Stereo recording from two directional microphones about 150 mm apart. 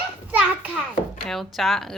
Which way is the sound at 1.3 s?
Centre (ahead or behind).